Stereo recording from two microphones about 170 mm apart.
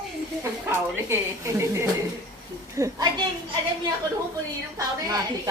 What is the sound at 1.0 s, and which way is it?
A woman's voice, 15° right (ahead or behind).